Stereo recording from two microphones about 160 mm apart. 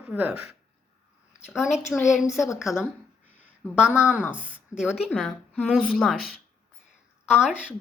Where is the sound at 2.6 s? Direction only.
15° left (ahead or behind).